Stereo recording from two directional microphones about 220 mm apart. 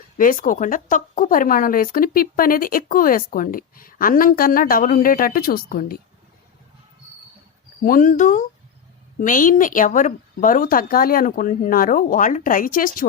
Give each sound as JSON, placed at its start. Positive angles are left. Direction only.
{"t": 0.2, "sound": "speech", "side_deg": 40}
{"t": 7.9, "sound": "speech", "side_deg": 40}